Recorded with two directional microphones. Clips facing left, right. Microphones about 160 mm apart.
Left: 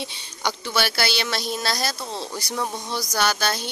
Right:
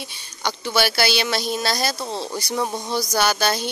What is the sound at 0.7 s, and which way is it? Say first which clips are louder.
A woman's voice: right 5 dB; 5° right (ahead or behind).